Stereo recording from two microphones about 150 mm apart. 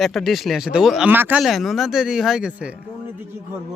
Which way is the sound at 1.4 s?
Centre (ahead or behind).